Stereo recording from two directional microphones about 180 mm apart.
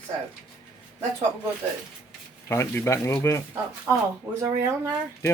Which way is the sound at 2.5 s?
15° left (ahead or behind).